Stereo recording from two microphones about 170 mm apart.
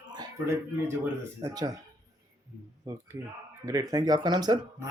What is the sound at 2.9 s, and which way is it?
Speech, 20° right (ahead or behind).